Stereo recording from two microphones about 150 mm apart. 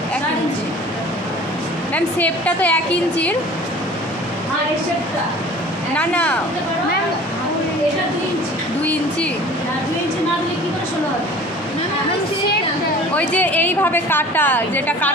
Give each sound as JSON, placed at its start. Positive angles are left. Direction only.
{"t": 2.0, "sound": "a woman's voice", "side_deg": 10}
{"t": 5.9, "sound": "a woman's voice", "side_deg": 10}
{"t": 13.1, "sound": "a woman's voice", "side_deg": 10}